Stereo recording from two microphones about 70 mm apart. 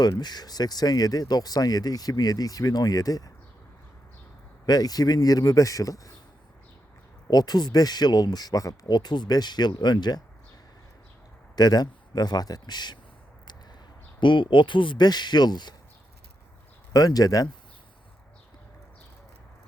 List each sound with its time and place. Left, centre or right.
0.0 s speech: left
4.6 s a man's voice: left
7.3 s speech: left
11.5 s speech: left
14.5 s speech: left
16.9 s a man's voice: left